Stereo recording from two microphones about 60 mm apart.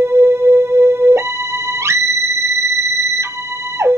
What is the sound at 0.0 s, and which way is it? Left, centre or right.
Music, right.